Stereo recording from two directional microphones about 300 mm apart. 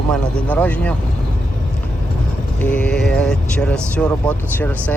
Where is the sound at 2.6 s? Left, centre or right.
Centre.